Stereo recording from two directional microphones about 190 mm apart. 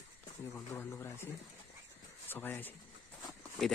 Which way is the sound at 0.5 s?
15° left (ahead or behind).